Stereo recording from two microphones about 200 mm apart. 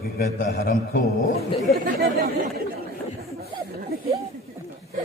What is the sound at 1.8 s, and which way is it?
Speech, 50° right (ahead or behind).